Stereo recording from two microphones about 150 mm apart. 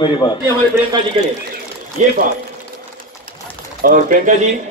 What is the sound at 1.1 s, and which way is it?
Speech, 35° right (ahead or behind).